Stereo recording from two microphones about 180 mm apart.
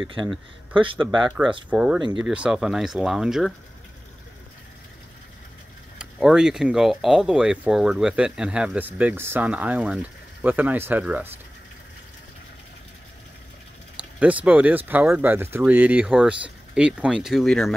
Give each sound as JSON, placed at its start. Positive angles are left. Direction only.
{"t": 0.0, "sound": "speech", "side_deg": -25}
{"t": 1.7, "sound": "speech", "side_deg": -5}
{"t": 5.9, "sound": "speech", "side_deg": -5}
{"t": 14.2, "sound": "speech", "side_deg": -10}